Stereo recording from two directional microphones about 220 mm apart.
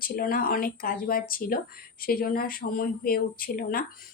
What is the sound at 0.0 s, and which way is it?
A woman's voice, 40° left (ahead or behind).